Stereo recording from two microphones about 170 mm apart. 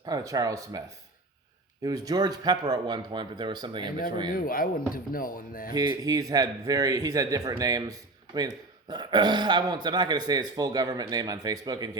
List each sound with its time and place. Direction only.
0.0 s speech: 20° right (ahead or behind)
4.3 s speech: 55° left (ahead or behind)
5.7 s speech: 25° right (ahead or behind)